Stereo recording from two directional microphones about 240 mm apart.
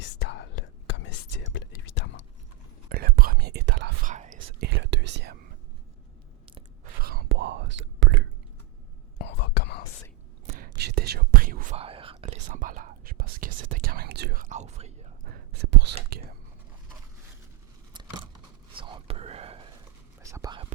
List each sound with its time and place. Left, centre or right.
0.2 s whispering: left
2.9 s whispering: right
4.4 s whispering: right
7.0 s whispering: right
9.1 s whispering: left
10.4 s whispering: right
18.8 s whispering: right
20.2 s whispering: centre